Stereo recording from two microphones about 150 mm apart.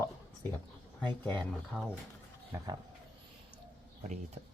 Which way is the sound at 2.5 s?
15° right (ahead or behind).